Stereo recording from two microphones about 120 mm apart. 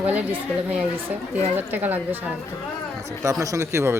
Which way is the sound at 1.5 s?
15° right (ahead or behind).